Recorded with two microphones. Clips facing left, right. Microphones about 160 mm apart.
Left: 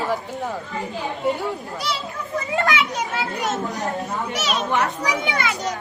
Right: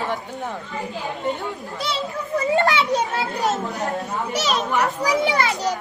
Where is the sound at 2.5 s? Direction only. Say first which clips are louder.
Right 3 dB; 35° right (ahead or behind).